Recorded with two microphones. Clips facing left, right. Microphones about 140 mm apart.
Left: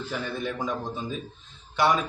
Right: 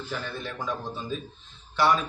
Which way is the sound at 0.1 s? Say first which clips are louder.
Left 4 dB; 10° left (ahead or behind).